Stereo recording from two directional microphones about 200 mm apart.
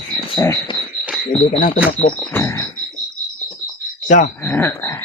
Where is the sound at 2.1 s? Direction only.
10° left (ahead or behind).